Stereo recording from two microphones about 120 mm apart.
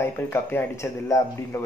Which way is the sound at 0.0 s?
20° left (ahead or behind).